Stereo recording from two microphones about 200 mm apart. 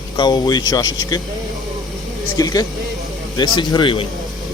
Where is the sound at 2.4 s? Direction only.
20° left (ahead or behind).